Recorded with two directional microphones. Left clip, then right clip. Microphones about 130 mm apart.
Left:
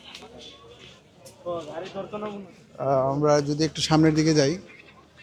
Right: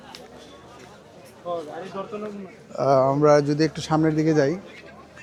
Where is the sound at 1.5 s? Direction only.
90° right.